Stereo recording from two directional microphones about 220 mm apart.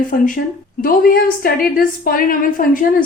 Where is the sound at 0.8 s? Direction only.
40° left (ahead or behind).